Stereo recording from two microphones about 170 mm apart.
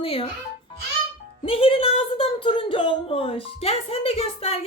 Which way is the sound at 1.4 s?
30° left (ahead or behind).